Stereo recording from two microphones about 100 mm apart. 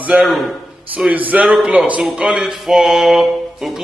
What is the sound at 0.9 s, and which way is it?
A man's voice, 15° right (ahead or behind).